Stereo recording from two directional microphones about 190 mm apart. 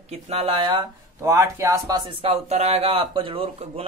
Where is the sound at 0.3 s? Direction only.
30° right (ahead or behind).